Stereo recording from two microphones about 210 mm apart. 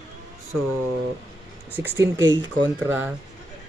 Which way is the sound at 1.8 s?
10° right (ahead or behind).